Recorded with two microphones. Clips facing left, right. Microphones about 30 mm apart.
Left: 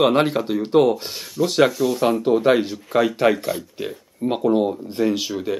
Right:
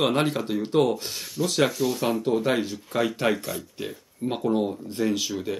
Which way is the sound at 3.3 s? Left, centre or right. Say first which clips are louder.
Left 7 dB; left.